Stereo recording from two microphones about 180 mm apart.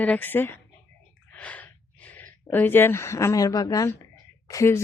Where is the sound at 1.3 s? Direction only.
10° left (ahead or behind).